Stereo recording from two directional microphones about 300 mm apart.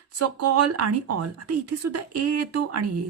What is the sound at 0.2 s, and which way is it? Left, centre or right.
A woman's voice, right.